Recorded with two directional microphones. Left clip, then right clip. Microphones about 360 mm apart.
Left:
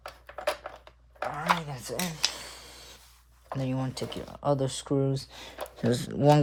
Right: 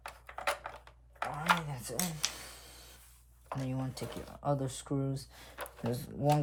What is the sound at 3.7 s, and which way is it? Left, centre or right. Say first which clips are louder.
Speech: left 7 dB; left.